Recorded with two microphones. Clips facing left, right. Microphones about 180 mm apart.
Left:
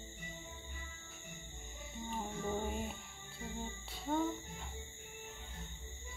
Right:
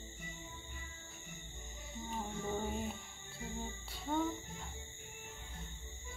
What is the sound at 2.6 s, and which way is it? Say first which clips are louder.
Music: even; 5° left (ahead or behind).